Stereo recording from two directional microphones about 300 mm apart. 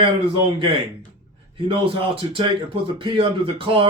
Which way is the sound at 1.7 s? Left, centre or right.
Centre.